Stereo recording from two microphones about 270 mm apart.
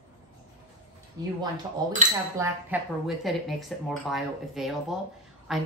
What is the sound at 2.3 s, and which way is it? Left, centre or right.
A woman's voice, centre.